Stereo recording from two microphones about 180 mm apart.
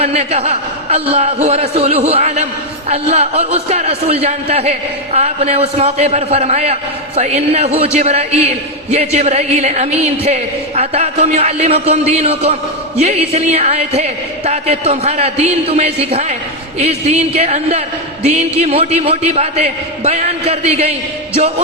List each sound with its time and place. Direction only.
0.0 s a man's voice: 35° right (ahead or behind)